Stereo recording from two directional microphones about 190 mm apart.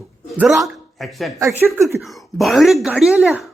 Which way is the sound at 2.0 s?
Centre (ahead or behind).